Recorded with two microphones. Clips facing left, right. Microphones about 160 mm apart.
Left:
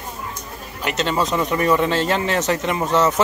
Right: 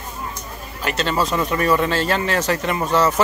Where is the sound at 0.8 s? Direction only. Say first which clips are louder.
Even; 20° left (ahead or behind).